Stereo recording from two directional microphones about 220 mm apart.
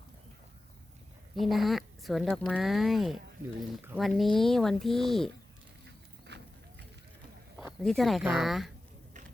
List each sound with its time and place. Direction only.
1.4 s speech: centre (ahead or behind)
6.2 s run: 50° right (ahead or behind)
7.8 s speech: centre (ahead or behind)